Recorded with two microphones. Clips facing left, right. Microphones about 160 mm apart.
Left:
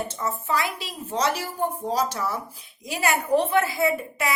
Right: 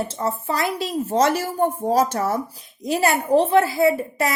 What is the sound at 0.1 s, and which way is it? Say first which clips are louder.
A woman's voice: right 3 dB; 30° right (ahead or behind).